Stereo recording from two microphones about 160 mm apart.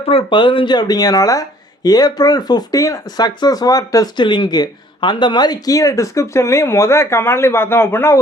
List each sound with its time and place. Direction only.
0.1 s speech: 35° left (ahead or behind); by 8.2 s 15° left (ahead or behind)